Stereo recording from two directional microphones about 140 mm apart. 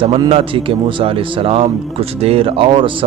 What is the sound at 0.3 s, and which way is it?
Speech, 40° right (ahead or behind).